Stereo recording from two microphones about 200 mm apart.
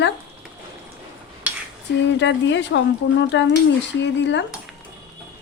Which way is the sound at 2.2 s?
65° left (ahead or behind).